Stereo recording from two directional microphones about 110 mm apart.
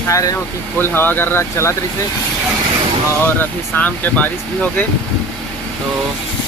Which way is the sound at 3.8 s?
15° left (ahead or behind).